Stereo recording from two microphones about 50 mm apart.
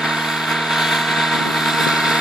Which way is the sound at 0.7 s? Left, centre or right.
Centre.